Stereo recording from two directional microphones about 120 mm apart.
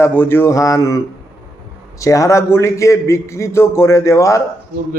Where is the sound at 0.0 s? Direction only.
15° left (ahead or behind).